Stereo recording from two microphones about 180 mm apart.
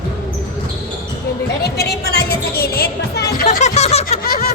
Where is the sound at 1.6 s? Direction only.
60° left (ahead or behind).